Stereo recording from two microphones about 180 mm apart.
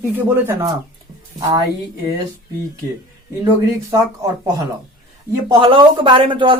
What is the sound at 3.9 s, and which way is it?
Speech, 20° right (ahead or behind).